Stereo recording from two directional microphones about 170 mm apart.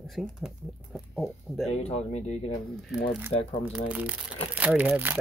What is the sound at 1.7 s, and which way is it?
Speech, 40° left (ahead or behind).